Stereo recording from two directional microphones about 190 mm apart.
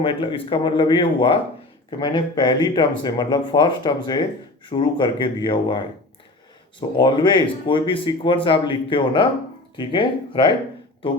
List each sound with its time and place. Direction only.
0.0 s speech: 30° left (ahead or behind)